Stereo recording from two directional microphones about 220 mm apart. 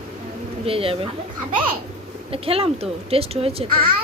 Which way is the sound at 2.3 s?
25° right (ahead or behind).